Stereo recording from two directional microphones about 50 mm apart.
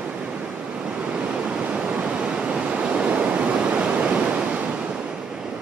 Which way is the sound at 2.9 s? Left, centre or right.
Right.